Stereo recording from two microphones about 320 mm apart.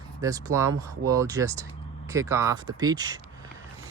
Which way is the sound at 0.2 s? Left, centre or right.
Centre.